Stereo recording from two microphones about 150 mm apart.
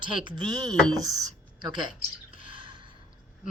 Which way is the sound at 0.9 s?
25° right (ahead or behind).